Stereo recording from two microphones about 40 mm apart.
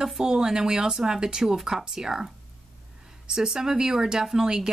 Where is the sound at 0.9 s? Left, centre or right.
Centre.